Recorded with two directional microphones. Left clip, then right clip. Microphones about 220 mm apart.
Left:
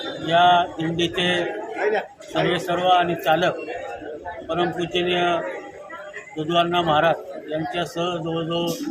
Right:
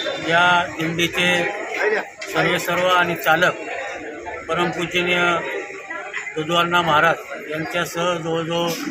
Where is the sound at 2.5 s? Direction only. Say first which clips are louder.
Left 1 dB; 15° left (ahead or behind).